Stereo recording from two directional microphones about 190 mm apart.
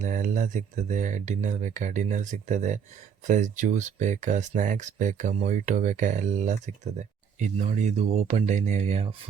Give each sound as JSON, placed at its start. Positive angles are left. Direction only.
{"t": 0.0, "sound": "speech", "side_deg": -40}